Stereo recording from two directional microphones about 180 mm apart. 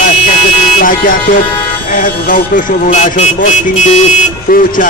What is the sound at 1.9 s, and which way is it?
A man's voice, 50° left (ahead or behind).